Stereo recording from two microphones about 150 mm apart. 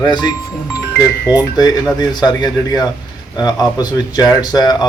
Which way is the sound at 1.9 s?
25° left (ahead or behind).